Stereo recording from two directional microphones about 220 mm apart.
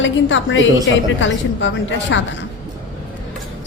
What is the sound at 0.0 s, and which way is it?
A woman's voice, 60° left (ahead or behind).